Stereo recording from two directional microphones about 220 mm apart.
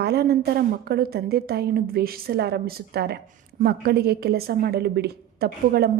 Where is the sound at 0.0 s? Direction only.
45° right (ahead or behind).